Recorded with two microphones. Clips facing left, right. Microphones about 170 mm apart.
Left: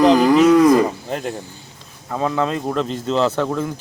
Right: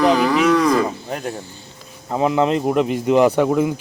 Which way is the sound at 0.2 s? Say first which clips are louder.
Left 4 dB; 20° left (ahead or behind).